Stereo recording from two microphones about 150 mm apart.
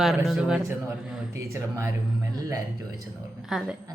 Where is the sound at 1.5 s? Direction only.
20° right (ahead or behind).